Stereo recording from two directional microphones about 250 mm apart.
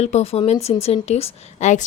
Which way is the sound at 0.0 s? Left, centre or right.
Left.